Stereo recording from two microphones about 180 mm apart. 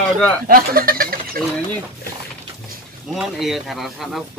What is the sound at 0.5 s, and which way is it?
Goat, 55° right (ahead or behind).